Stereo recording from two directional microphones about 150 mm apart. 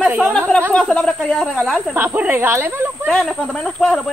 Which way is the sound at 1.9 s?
15° right (ahead or behind).